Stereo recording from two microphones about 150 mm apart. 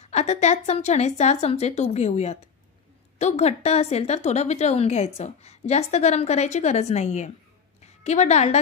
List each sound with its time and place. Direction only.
0.0 s a woman's voice: 45° left (ahead or behind)